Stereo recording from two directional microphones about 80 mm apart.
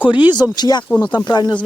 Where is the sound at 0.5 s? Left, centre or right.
Left.